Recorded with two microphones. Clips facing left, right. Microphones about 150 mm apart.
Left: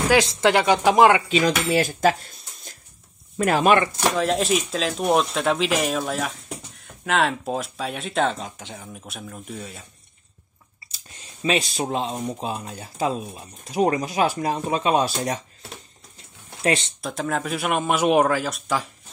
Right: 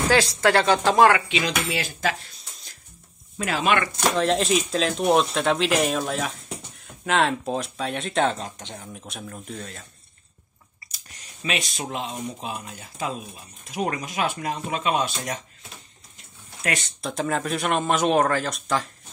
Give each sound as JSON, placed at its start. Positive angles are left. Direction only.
{"t": 0.1, "sound": "speech", "side_deg": 20}
{"t": 1.3, "sound": "speech", "side_deg": 45}
{"t": 4.2, "sound": "speech", "side_deg": 0}
{"t": 10.9, "sound": "speech", "side_deg": 25}
{"t": 16.6, "sound": "speech", "side_deg": 25}
{"t": 17.0, "sound": "speech", "side_deg": 0}